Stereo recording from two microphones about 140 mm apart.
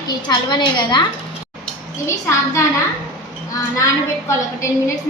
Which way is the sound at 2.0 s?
20° left (ahead or behind).